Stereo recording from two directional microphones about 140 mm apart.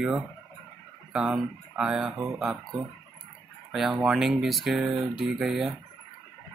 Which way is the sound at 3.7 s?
Centre (ahead or behind).